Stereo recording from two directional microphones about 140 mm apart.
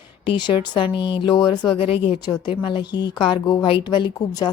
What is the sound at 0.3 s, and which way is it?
Speech, 35° left (ahead or behind).